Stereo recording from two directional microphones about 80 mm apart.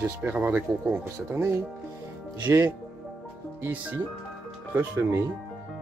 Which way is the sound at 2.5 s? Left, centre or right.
Right.